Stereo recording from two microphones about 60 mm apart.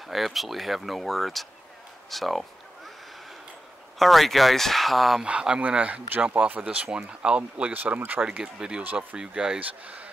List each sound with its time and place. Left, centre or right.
0.1 s speech: centre
4.0 s speech: centre
5.2 s speech: centre
7.7 s speech: right
8.2 s speech: centre